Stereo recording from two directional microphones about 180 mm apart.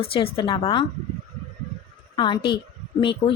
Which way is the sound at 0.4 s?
30° left (ahead or behind).